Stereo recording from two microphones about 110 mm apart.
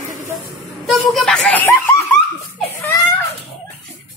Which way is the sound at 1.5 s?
15° left (ahead or behind).